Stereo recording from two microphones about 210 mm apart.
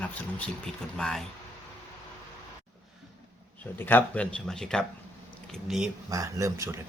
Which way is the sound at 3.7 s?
10° left (ahead or behind).